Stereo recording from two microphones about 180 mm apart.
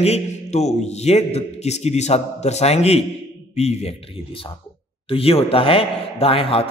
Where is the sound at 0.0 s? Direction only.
35° left (ahead or behind).